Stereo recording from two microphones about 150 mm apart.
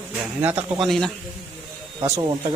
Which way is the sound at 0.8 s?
Centre (ahead or behind).